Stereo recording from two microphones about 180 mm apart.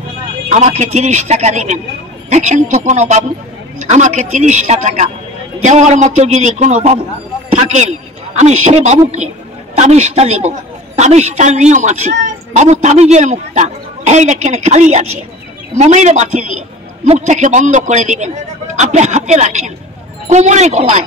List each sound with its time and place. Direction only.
0.5 s a man's voice: 40° right (ahead or behind)